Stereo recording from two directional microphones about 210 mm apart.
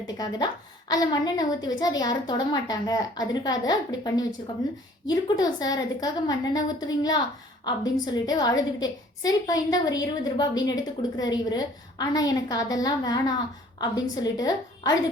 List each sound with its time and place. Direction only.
0.2 s a woman's voice: 20° left (ahead or behind)